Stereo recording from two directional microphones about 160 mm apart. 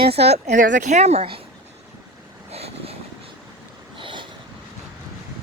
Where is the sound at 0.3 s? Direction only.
50° right (ahead or behind).